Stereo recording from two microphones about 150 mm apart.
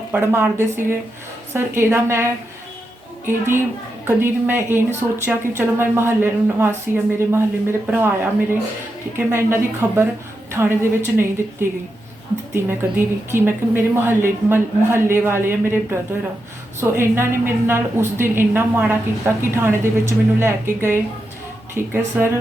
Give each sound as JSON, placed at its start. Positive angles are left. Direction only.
{"t": 0.1, "sound": "speech", "side_deg": -15}
{"t": 12.6, "sound": "speech", "side_deg": -15}